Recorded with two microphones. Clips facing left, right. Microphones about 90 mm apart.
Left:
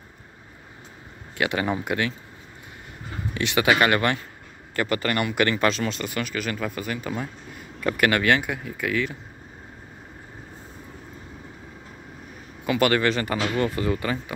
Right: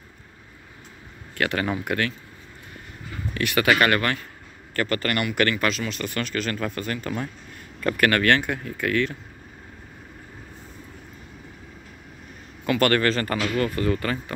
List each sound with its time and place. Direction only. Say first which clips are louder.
1.4 s speech: even; 15° left (ahead or behind)
6.0 s speech: right 1 dB; 10° left (ahead or behind)
12.6 s speech: even; 15° left (ahead or behind)